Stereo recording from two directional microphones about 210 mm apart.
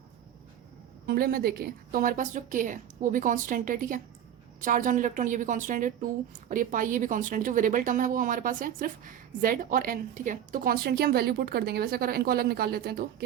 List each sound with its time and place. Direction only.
1.0 s a woman's voice: 45° right (ahead or behind)